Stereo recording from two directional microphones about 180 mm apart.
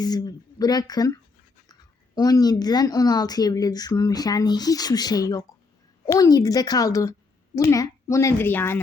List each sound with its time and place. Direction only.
0.0 s speech: 20° left (ahead or behind)
2.1 s a woman's voice: 20° left (ahead or behind)